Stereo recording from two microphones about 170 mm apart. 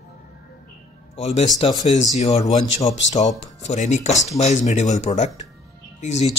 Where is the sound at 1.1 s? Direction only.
40° left (ahead or behind).